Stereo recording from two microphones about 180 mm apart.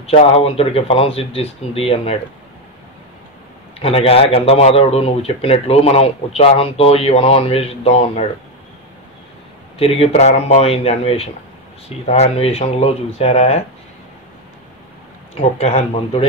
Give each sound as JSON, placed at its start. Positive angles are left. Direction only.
{"t": 0.0, "sound": "speech", "side_deg": 35}
{"t": 3.8, "sound": "speech", "side_deg": 30}
{"t": 9.8, "sound": "speech", "side_deg": 35}
{"t": 15.3, "sound": "speech", "side_deg": 35}